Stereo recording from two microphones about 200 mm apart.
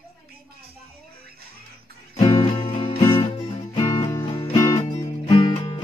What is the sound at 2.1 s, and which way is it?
Music, 20° left (ahead or behind).